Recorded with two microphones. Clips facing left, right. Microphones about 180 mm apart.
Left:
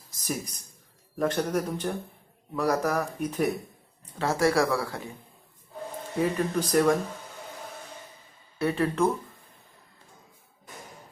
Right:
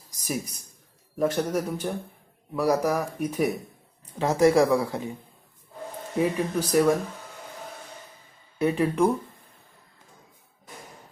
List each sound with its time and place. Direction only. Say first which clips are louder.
1.2 s speech: right 2 dB; 10° right (ahead or behind)
6.1 s speech: right 1 dB; 10° right (ahead or behind)
8.5 s speech: right 3 dB; 15° right (ahead or behind)